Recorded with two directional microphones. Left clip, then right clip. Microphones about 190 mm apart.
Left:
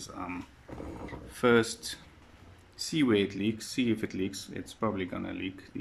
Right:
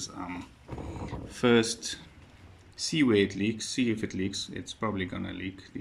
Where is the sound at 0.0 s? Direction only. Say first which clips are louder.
Right 1 dB; 5° left (ahead or behind).